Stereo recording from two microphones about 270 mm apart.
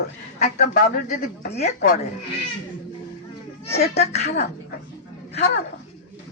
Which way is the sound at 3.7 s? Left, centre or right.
Left.